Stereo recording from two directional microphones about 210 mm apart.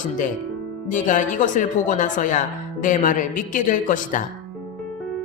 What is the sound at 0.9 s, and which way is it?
A woman's voice, 35° left (ahead or behind).